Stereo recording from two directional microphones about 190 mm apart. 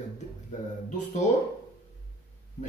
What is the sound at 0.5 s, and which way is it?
Speech, 40° left (ahead or behind).